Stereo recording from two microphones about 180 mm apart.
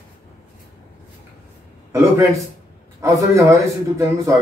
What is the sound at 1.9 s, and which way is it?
A man's voice, 15° right (ahead or behind).